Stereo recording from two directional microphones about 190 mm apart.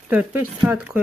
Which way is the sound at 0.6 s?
5° right (ahead or behind).